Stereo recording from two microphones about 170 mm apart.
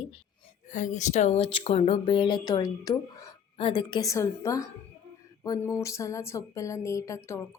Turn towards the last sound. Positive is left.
turn(degrees=15)  # may be behind; listen again after turning